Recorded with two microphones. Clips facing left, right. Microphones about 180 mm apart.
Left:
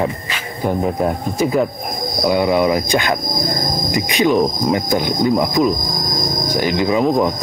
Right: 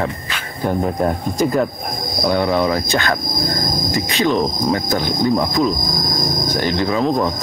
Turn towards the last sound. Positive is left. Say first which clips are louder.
# left 2 dB
turn(degrees=15)  # may be behind; listen again after turning